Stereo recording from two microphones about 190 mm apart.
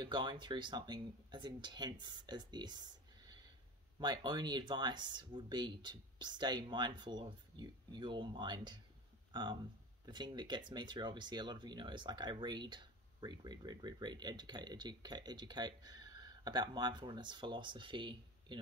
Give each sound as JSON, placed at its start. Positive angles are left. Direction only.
{"t": 0.0, "sound": "speech", "side_deg": -25}